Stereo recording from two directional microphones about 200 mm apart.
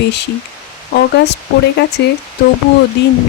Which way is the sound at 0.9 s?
55° left (ahead or behind).